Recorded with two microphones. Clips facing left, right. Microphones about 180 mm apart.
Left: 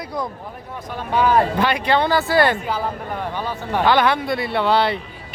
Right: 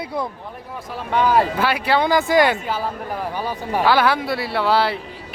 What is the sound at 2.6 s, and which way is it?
Speech, 5° right (ahead or behind).